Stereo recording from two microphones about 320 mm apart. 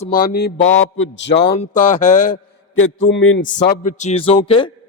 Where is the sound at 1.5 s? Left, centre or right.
Left.